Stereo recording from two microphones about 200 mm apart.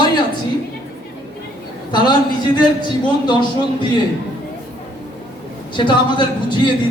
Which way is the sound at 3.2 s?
20° left (ahead or behind).